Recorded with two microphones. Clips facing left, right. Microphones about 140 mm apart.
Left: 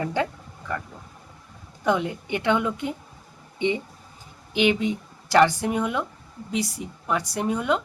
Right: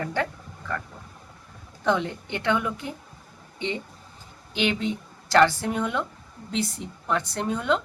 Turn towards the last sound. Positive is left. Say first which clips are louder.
# left 1 dB
turn(degrees=10)  # may be behind; listen again after turning